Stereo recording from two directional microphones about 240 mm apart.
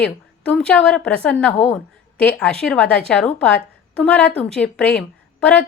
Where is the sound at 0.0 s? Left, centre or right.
Centre.